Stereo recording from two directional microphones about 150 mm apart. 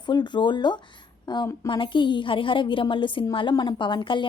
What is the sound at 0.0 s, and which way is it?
A woman's voice, 30° left (ahead or behind).